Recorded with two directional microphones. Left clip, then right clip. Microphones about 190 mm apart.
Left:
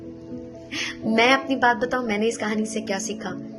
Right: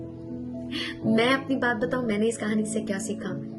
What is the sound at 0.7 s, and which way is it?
A woman's voice, 25° right (ahead or behind).